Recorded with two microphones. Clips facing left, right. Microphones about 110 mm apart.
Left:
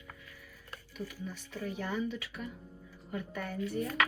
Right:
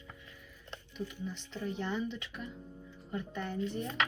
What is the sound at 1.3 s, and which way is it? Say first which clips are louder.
Speech: even; 25° right (ahead or behind).